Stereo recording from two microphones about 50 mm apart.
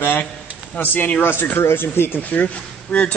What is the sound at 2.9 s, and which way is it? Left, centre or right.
Speech, left.